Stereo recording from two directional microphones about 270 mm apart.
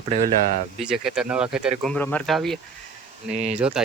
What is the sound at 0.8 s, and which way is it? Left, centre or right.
Speech, centre.